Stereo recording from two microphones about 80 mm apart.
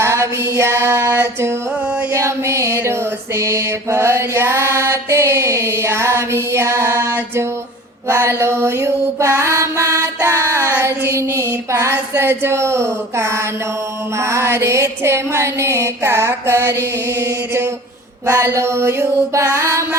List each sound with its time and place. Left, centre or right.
0.0 s female singing: right
1.2 s mantra: right
2.1 s music: right
3.3 s mantra: right
10.2 s child singing: right
14.2 s mantra: right
17.2 s music: right
18.3 s mantra: right